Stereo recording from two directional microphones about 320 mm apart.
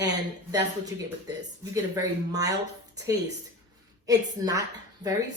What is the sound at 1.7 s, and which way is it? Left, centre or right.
Speech, centre.